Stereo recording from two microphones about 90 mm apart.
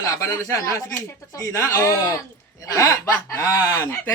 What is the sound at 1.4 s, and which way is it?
A man's voice, 35° left (ahead or behind).